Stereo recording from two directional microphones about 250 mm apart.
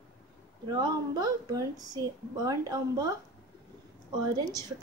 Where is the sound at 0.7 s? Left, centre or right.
Centre.